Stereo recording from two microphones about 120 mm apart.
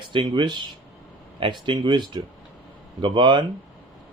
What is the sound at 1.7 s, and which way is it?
Speech, 40° right (ahead or behind).